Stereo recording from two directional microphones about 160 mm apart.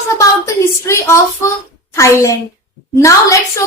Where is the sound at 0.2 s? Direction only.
20° left (ahead or behind).